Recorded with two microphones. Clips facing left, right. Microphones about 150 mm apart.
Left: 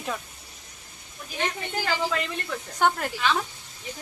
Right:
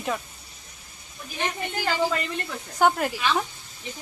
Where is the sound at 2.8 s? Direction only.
10° right (ahead or behind).